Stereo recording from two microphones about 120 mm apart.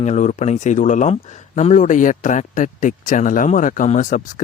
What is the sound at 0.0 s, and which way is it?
Speech, 80° left.